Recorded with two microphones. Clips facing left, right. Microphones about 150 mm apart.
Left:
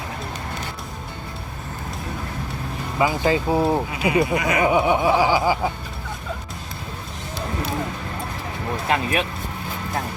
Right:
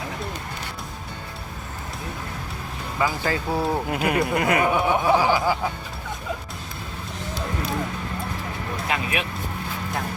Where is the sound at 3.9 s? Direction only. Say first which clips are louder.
Left 2 dB; 60° right (ahead or behind).